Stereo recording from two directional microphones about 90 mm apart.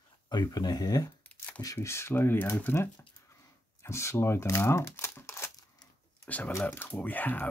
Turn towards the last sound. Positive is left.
turn(degrees=20)  # may be behind; listen again after turning